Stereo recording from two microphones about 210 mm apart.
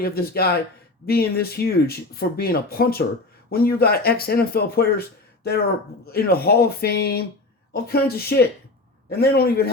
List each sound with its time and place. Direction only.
0.0 s speech: 45° left (ahead or behind)